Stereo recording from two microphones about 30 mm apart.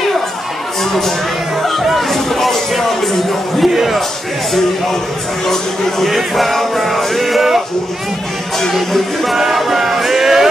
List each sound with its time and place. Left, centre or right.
1.6 s a man's voice: centre
5.5 s speech: centre
8.9 s speech: centre
9.4 s music: centre